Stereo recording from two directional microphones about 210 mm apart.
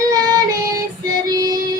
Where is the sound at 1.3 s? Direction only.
15° right (ahead or behind).